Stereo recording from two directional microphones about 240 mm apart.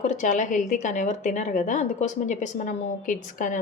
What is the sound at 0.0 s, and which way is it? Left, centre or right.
A woman's voice, left.